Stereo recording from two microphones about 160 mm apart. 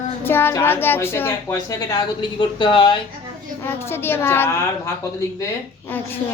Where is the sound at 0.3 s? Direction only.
15° left (ahead or behind); by 3.0 s 30° left (ahead or behind).